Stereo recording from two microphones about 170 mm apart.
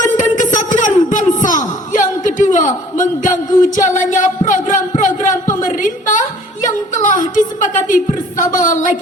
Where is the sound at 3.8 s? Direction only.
45° left (ahead or behind).